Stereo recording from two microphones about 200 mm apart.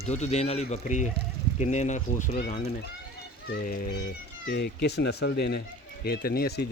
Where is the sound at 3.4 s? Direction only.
45° left (ahead or behind).